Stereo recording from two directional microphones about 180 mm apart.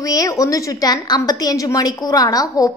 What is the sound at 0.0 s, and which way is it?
A woman's voice, 20° left (ahead or behind).